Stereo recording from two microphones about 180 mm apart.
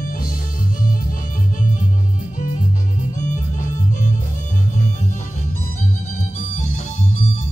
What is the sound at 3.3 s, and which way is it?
Music, 45° left (ahead or behind).